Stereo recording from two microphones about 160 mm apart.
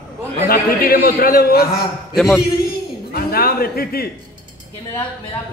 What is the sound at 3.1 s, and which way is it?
A man's voice, 70° left (ahead or behind).